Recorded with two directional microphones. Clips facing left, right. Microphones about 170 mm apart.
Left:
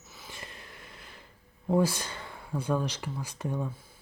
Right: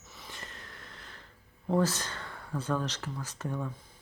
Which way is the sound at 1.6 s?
10° left (ahead or behind).